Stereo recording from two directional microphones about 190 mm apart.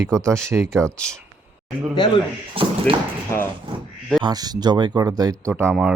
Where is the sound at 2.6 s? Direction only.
30° right (ahead or behind).